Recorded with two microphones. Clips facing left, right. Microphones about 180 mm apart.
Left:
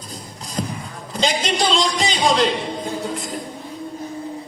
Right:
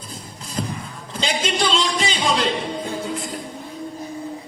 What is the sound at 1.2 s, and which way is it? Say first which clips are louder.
Music: left 2 dB; 40° left (ahead or behind).